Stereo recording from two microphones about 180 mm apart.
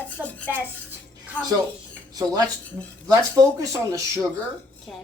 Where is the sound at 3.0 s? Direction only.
20° right (ahead or behind).